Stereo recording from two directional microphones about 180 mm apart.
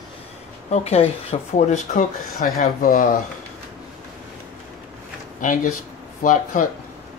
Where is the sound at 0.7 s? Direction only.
35° left (ahead or behind); by 3.1 s 50° left (ahead or behind).